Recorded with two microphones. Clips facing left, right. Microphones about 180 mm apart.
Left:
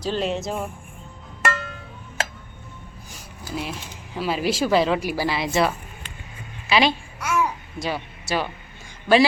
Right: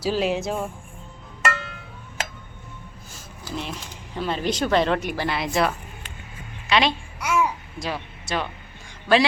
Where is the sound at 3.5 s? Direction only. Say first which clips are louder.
Left 1 dB; 5° left (ahead or behind).